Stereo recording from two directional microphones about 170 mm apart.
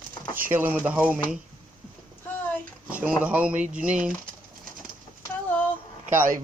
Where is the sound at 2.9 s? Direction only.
10° right (ahead or behind).